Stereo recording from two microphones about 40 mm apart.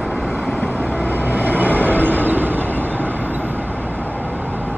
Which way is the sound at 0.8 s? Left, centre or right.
Left.